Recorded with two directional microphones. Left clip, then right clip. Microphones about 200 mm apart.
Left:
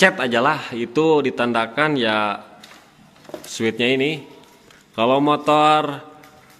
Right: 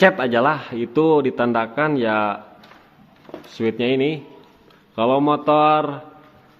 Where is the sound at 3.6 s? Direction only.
Centre (ahead or behind).